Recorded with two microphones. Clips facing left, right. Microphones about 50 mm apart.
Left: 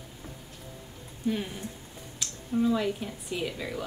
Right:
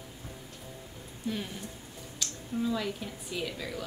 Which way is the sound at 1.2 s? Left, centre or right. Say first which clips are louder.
Left 5 dB; centre.